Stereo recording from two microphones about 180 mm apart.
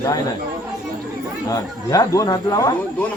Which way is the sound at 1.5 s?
20° left (ahead or behind).